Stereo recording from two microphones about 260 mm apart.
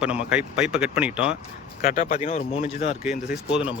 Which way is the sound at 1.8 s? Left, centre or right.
Left.